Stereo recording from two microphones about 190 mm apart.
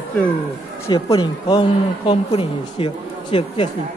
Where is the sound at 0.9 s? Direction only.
20° left (ahead or behind).